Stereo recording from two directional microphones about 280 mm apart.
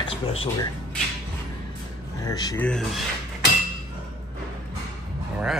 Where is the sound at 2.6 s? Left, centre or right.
Centre.